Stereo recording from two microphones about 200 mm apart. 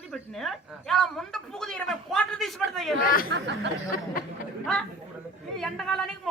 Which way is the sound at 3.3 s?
60° right (ahead or behind).